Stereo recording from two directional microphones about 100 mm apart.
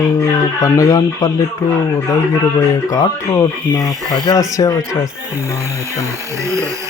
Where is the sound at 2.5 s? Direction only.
30° left (ahead or behind).